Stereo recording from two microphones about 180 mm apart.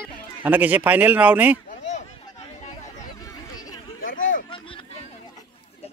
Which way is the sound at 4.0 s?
45° left (ahead or behind).